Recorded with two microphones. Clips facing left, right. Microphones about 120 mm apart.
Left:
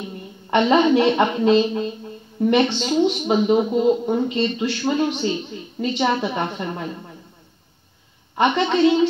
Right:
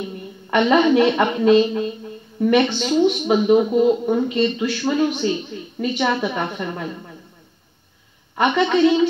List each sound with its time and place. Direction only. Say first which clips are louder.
0.5 s a man's voice: even; 25° left (ahead or behind)
8.4 s a man's voice: right 1 dB; 20° left (ahead or behind)